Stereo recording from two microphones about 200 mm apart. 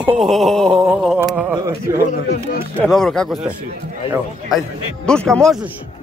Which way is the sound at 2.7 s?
Centre (ahead or behind).